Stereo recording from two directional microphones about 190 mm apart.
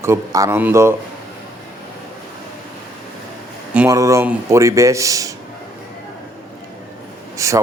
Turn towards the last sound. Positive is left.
turn(degrees=-15)  # may be behind; listen again after turning